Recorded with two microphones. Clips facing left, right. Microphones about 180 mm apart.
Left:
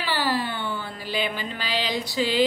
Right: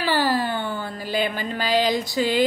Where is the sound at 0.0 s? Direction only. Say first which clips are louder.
Right 4 dB; 45° right (ahead or behind).